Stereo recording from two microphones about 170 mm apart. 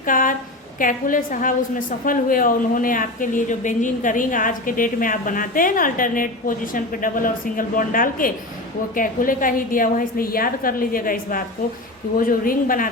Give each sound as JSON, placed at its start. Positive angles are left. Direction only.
{"t": 0.0, "sound": "a woman's voice", "side_deg": 50}